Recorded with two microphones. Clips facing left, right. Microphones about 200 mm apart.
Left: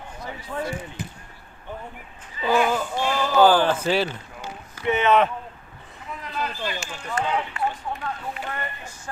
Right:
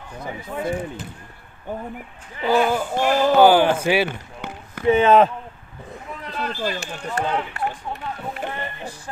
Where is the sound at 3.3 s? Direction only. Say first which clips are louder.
Right 2 dB; 10° right (ahead or behind).